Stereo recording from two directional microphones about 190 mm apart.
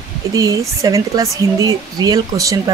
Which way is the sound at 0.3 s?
20° right (ahead or behind).